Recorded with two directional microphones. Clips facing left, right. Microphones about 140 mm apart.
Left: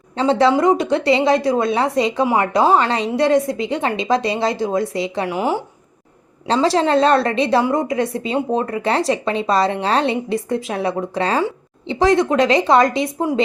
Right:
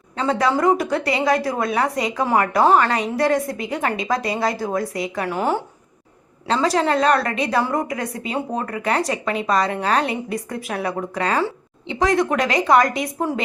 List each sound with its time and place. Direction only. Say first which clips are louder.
0.2 s speech: left 4 dB; 25° left (ahead or behind)
5.3 s speech: even; 10° left (ahead or behind)
6.5 s speech: left 3 dB; 30° left (ahead or behind)